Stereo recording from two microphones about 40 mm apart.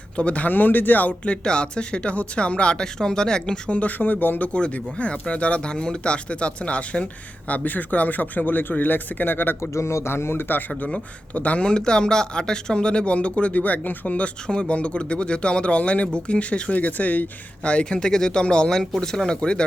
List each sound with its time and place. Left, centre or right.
0.2 s speech: left
0.4 s speech: left
1.2 s speech: left
3.7 s speech: left
4.5 s speech: left
10.0 s speech: left
11.3 s speech: left
11.6 s speech: left
14.4 s speech: left
17.6 s speech: left